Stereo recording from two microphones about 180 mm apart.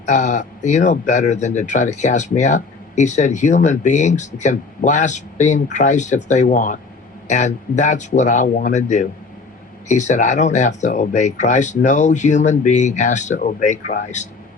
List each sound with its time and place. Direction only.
0.0 s speech: 40° left (ahead or behind)